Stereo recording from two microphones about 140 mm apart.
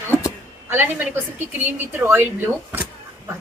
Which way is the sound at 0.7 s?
15° right (ahead or behind).